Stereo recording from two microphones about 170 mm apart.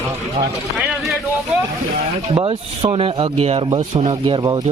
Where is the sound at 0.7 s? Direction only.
Centre (ahead or behind).